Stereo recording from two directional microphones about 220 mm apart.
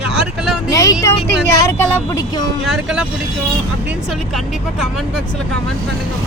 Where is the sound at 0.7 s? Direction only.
15° left (ahead or behind).